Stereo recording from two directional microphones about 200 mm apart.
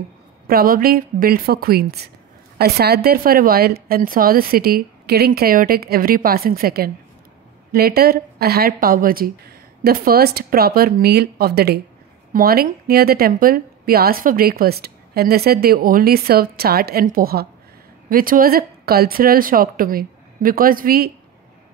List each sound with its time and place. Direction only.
0.5 s a woman's voice: 50° right (ahead or behind)